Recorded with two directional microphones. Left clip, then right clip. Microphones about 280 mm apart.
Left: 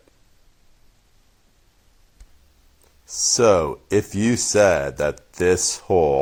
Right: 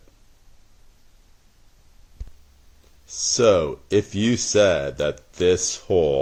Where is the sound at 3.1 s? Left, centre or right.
Left.